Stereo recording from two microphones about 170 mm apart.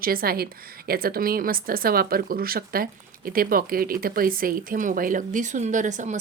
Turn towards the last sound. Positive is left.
turn(degrees=-45)  # may be behind; listen again after turning